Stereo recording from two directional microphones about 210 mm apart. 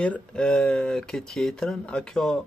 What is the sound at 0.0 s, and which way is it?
Speech, 5° left (ahead or behind).